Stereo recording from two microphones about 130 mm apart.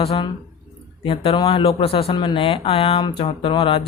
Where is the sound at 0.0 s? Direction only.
45° left (ahead or behind).